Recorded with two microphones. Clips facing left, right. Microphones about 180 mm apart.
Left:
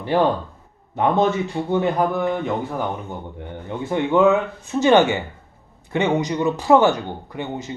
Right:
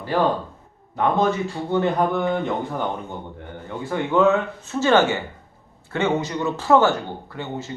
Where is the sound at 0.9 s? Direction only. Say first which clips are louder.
Left 2 dB; 20° left (ahead or behind).